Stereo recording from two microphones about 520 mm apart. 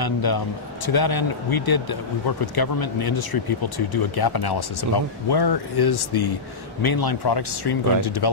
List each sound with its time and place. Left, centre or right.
0.0 s speech: left